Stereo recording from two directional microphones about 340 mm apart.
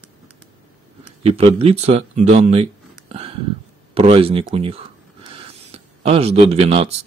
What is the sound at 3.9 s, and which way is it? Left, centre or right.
Speech, centre.